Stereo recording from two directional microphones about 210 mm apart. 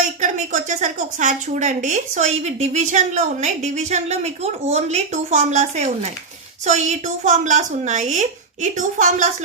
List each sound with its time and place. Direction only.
0.2 s a woman's voice: 35° right (ahead or behind)